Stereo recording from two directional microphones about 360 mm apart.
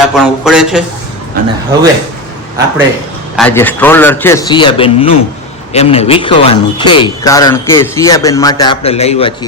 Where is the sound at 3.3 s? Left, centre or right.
Centre.